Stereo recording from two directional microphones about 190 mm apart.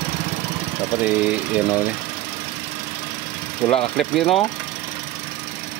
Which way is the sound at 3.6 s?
15° left (ahead or behind).